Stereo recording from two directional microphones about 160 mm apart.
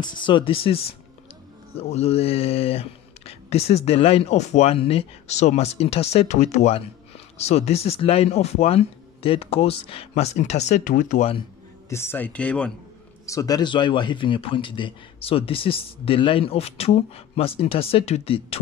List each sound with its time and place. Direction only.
0.0 s a man's voice: 30° left (ahead or behind); by 11.2 s 55° left (ahead or behind)
11.9 s speech: 15° left (ahead or behind)
13.2 s a man's voice: 20° left (ahead or behind); by 18.6 s 35° left (ahead or behind)